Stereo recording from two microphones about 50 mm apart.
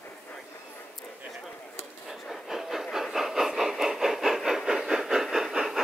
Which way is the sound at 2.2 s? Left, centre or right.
Centre.